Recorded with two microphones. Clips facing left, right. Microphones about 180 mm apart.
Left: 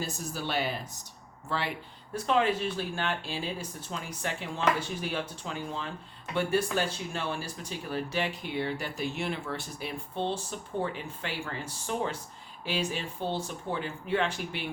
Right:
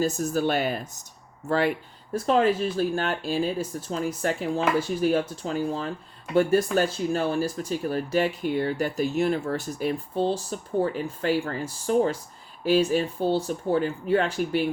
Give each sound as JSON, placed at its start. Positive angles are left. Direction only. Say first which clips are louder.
{"t": 0.0, "sound": "speech", "louder": "right 11 dB", "side_deg": -45}